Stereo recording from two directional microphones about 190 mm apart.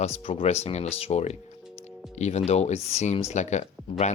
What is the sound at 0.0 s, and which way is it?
Speech, 35° left (ahead or behind).